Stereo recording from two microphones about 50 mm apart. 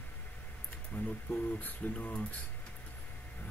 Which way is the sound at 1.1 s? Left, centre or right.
Left.